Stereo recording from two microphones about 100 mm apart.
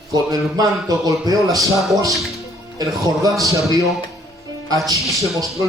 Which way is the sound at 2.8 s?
40° right (ahead or behind).